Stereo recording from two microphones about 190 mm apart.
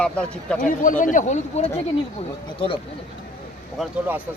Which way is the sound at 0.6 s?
45° left (ahead or behind).